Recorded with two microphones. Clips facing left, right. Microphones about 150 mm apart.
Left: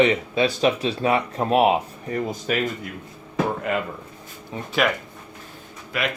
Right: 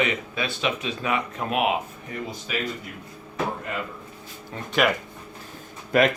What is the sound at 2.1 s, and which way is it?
Speech, 50° left (ahead or behind).